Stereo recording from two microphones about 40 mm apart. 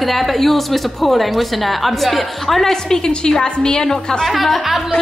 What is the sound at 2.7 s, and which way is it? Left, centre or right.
A woman's voice, centre.